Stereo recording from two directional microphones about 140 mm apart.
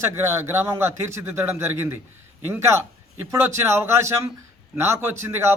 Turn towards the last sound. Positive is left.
turn(degrees=-20)  # may be behind; listen again after turning